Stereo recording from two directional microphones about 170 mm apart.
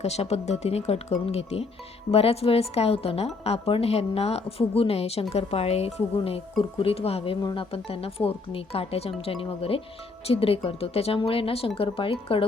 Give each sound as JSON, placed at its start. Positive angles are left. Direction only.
{"t": 0.0, "sound": "speech", "side_deg": 40}